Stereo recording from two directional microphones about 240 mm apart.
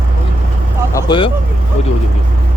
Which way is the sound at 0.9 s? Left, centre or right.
Centre.